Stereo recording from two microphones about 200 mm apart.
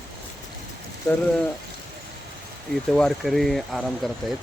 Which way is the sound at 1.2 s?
5° left (ahead or behind).